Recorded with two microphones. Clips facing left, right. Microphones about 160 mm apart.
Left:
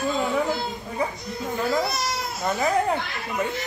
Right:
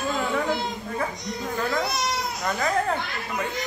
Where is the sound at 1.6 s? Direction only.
5° left (ahead or behind).